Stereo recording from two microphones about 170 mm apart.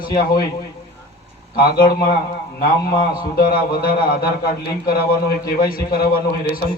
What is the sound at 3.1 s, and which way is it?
A man's voice, 55° left (ahead or behind).